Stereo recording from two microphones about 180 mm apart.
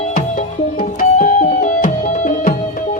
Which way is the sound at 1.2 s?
40° left (ahead or behind).